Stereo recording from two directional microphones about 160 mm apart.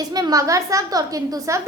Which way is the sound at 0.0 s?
25° right (ahead or behind).